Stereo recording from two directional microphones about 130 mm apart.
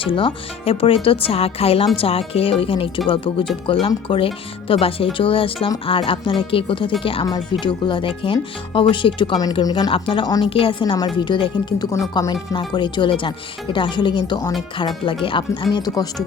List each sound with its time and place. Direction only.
0.0 s speech: 40° left (ahead or behind)